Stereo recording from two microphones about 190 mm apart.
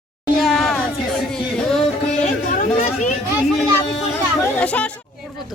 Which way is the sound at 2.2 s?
35° left (ahead or behind).